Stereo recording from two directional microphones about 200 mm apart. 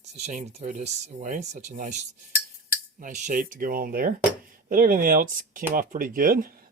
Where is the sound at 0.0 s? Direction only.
35° right (ahead or behind).